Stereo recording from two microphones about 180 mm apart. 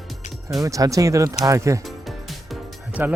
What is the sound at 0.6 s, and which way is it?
Speech, 20° right (ahead or behind).